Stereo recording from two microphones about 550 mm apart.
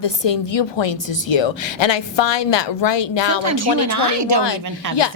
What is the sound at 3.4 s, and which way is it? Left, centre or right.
Speech, right.